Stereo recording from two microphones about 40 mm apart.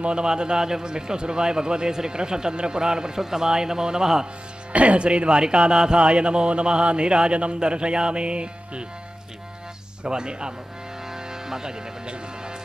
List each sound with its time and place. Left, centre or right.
0.0 s a man's voice: right
4.7 s a man's voice: right
10.0 s a man's voice: right
11.1 s music: centre